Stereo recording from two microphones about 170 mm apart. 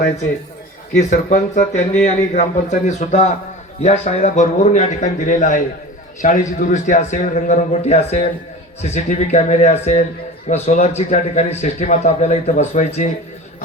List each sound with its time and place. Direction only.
0.9 s a man's voice: 50° left (ahead or behind)